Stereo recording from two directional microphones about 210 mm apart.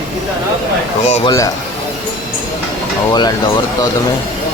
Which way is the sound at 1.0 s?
35° left (ahead or behind).